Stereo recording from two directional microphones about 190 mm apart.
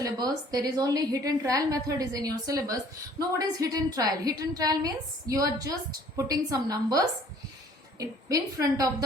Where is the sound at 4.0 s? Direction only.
20° right (ahead or behind).